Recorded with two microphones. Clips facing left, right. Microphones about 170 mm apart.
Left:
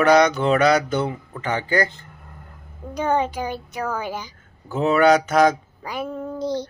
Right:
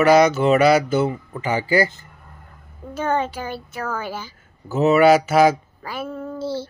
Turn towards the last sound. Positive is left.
turn(degrees=15)  # may be behind; listen again after turning